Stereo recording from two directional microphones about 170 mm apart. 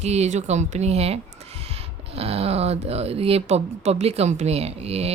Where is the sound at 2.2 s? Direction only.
35° right (ahead or behind).